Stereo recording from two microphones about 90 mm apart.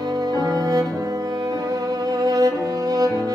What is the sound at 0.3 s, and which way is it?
Music, 45° right (ahead or behind).